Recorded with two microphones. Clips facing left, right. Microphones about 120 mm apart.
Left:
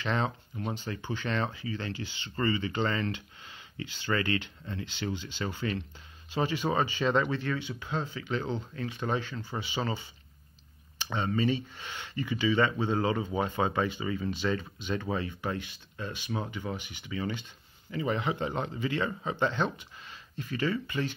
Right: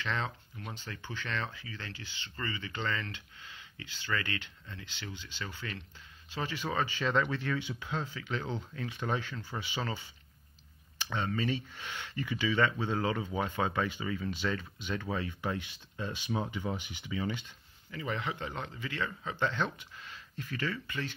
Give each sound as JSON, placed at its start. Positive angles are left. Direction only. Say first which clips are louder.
{"t": 0.0, "sound": "speech", "louder": "left 5 dB", "side_deg": 25}
{"t": 2.3, "sound": "speech", "louder": "left 10 dB", "side_deg": 35}
{"t": 6.3, "sound": "speech", "louder": "left 6 dB", "side_deg": 15}
{"t": 7.5, "sound": "speech", "louder": "left 1 dB", "side_deg": -10}
{"t": 8.0, "sound": "speech", "louder": "left 4 dB", "side_deg": 5}
{"t": 11.1, "sound": "speech", "louder": "left 4 dB", "side_deg": 10}
{"t": 15.5, "sound": "speech", "louder": "left 2 dB", "side_deg": -15}
{"t": 17.1, "sound": "speech", "louder": "left 1 dB", "side_deg": -5}
{"t": 17.9, "sound": "speech", "louder": "left 6 dB", "side_deg": 20}
{"t": 19.8, "sound": "speech", "louder": "left 1 dB", "side_deg": 10}